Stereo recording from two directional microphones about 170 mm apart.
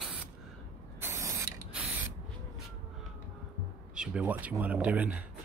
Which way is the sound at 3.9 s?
5° right (ahead or behind).